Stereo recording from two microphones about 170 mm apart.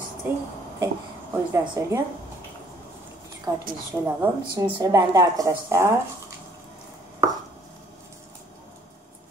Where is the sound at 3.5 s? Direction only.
20° right (ahead or behind).